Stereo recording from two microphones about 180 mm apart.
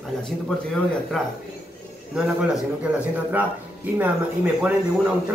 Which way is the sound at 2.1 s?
5° right (ahead or behind).